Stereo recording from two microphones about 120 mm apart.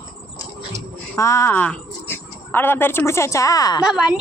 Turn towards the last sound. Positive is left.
turn(degrees=-5)  # may be behind; listen again after turning